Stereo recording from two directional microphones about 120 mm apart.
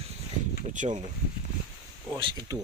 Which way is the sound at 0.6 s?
90° right.